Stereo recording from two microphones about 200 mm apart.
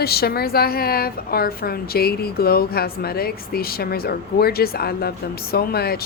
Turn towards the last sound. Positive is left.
turn(degrees=50)  # may be behind; listen again after turning